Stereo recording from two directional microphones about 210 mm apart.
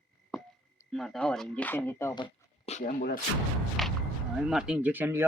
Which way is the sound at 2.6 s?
35° left (ahead or behind).